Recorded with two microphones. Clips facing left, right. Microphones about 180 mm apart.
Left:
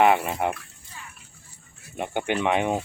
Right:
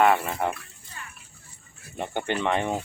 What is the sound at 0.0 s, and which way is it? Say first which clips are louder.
Speech: left 1 dB; 15° left (ahead or behind).